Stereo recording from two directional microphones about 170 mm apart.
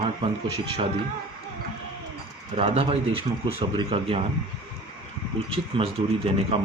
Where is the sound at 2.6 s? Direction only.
35° right (ahead or behind).